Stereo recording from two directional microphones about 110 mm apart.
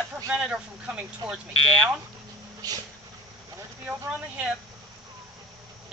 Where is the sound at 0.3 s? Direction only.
10° right (ahead or behind).